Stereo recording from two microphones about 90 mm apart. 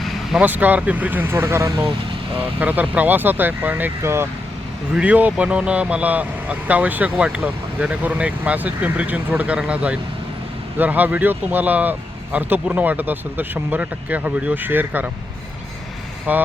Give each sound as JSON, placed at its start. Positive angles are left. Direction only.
{"t": 0.4, "sound": "speech", "side_deg": -20}
{"t": 2.6, "sound": "speech", "side_deg": -20}
{"t": 4.9, "sound": "speech", "side_deg": -15}
{"t": 16.3, "sound": "speech", "side_deg": -15}